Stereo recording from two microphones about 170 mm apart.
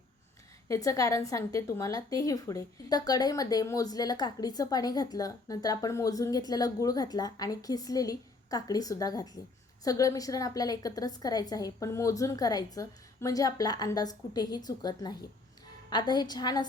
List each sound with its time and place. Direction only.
0.7 s a woman's voice: 20° left (ahead or behind)